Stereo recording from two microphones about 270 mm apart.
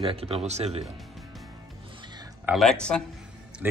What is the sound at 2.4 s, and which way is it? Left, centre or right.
Speech, centre.